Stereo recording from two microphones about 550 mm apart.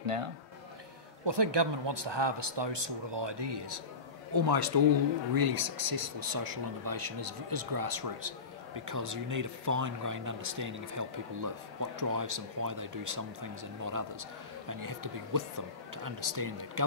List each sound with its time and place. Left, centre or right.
0.0 s a man's voice: right
1.2 s speech: right